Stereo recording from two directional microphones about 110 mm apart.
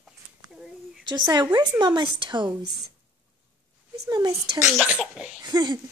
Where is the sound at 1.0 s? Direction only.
40° right (ahead or behind).